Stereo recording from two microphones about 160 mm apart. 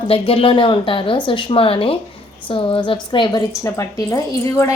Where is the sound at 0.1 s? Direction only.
35° left (ahead or behind).